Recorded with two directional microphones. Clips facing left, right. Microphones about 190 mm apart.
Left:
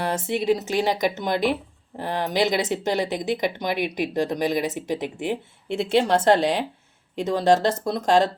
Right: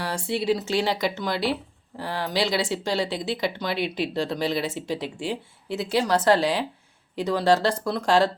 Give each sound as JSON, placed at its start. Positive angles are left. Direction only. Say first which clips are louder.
{"t": 0.0, "sound": "speech", "louder": "left 3 dB", "side_deg": 20}